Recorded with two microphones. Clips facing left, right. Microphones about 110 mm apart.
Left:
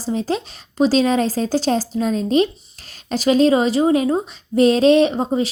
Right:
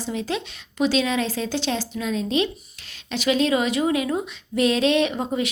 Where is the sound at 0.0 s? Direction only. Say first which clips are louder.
Left 5 dB; 35° left (ahead or behind).